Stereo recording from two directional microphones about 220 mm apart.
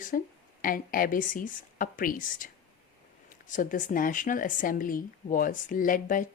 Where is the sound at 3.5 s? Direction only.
35° left (ahead or behind).